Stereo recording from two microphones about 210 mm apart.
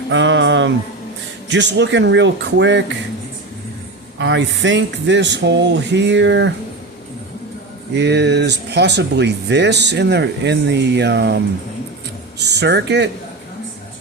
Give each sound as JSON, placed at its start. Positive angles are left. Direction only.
{"t": 0.1, "sound": "a sound", "side_deg": -65}
{"t": 1.5, "sound": "speech", "side_deg": -60}
{"t": 4.2, "sound": "speech", "side_deg": -60}
{"t": 7.9, "sound": "speech", "side_deg": -55}
{"t": 12.4, "sound": "speech", "side_deg": -50}